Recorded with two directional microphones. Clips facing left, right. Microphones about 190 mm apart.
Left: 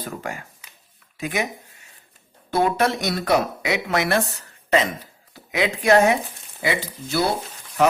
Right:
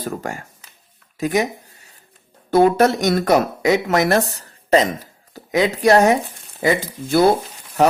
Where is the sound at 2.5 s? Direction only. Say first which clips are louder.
Right 7 dB; 45° right (ahead or behind).